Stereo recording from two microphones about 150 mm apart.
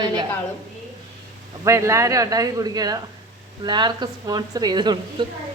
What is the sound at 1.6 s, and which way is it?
Speech, 20° right (ahead or behind).